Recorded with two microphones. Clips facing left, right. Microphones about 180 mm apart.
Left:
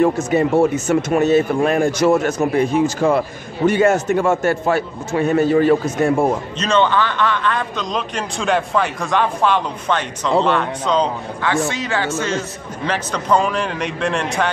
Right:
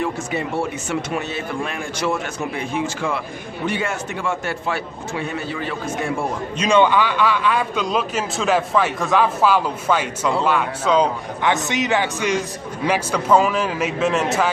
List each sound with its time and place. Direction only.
0.0 s speech: 45° left (ahead or behind)
6.6 s a man's voice: 10° right (ahead or behind)
11.4 s a man's voice: 20° right (ahead or behind); by 14.5 s 5° right (ahead or behind)